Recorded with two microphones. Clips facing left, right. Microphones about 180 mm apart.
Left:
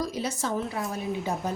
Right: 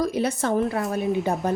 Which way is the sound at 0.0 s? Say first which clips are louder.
Right 6 dB; 60° right (ahead or behind).